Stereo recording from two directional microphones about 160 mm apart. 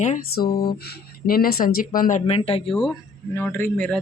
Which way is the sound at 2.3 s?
35° left (ahead or behind).